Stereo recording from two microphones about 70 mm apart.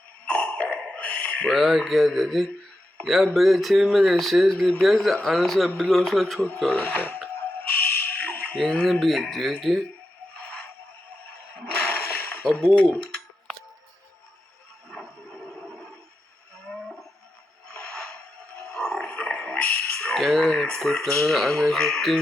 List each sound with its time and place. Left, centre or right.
0.3 s a sound: left
1.5 s speech: centre
6.7 s speech: left
7.8 s fire alarm: left
8.5 s speech: centre
8.9 s speech: centre
10.3 s a sound: left
12.7 s speech: left
14.8 s a sound: centre
17.7 s a sound: centre
18.6 s music: centre
20.1 s speech: centre